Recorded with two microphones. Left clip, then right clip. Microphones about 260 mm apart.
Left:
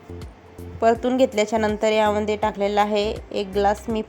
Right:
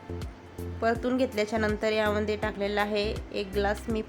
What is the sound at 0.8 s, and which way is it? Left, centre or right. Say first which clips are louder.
A woman's voice: left 9 dB; centre.